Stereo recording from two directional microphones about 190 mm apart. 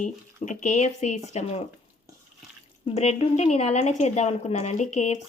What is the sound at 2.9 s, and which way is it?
Speech, 35° left (ahead or behind).